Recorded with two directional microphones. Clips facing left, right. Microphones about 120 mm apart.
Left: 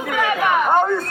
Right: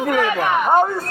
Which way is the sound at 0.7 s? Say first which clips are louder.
Right 3 dB; 10° right (ahead or behind).